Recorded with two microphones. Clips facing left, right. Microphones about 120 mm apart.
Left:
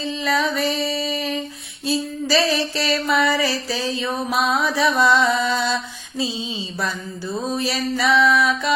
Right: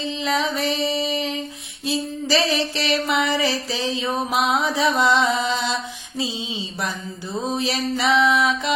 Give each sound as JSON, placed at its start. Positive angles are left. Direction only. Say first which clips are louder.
{"t": 0.1, "sound": "music", "louder": "left 2 dB", "side_deg": -20}
{"t": 1.9, "sound": "a sound", "louder": "left 1 dB", "side_deg": -20}
{"t": 7.5, "sound": "music", "louder": "even", "side_deg": -20}